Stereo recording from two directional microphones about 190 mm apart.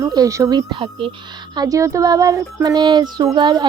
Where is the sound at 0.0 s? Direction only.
20° right (ahead or behind).